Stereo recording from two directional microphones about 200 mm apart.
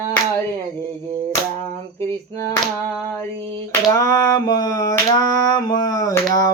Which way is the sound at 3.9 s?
15° left (ahead or behind).